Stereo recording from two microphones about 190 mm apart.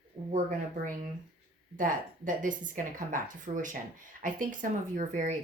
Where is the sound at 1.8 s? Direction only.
45° right (ahead or behind).